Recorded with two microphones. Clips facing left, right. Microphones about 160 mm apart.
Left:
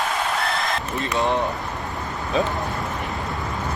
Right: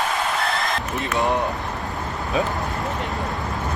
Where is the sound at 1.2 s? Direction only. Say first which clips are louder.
Even; 15° right (ahead or behind).